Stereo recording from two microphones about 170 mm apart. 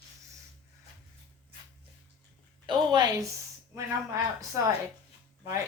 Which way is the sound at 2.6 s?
25° right (ahead or behind).